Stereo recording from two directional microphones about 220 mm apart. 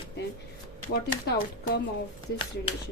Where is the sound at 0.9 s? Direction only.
40° left (ahead or behind).